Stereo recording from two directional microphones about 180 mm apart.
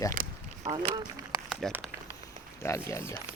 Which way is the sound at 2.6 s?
15° left (ahead or behind).